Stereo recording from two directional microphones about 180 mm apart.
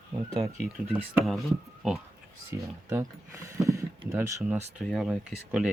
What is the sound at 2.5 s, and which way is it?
Speech, 15° right (ahead or behind).